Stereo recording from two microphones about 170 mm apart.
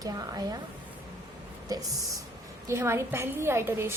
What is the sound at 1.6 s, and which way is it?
A woman's voice, 20° right (ahead or behind).